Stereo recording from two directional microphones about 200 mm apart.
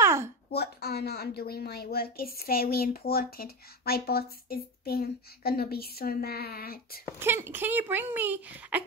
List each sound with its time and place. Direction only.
0.0 s a sound: 15° right (ahead or behind)
0.5 s a woman's voice: 55° left (ahead or behind)
7.2 s speech: 10° right (ahead or behind)